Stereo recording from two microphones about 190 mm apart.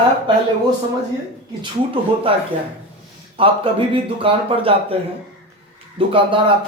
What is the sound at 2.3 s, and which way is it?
Speech, 30° right (ahead or behind).